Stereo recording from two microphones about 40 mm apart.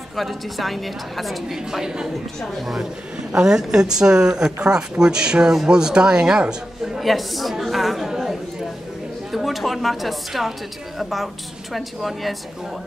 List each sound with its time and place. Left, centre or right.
0.1 s a woman's voice: centre
1.5 s a woman's voice: centre
3.4 s speech: centre
7.0 s a woman's voice: centre
8.1 s chatter: centre
9.3 s a woman's voice: centre